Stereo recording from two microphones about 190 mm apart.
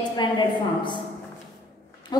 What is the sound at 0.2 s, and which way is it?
Speech, 25° left (ahead or behind).